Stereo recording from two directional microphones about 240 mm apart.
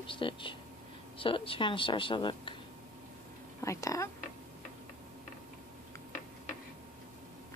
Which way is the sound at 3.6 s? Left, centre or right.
Centre.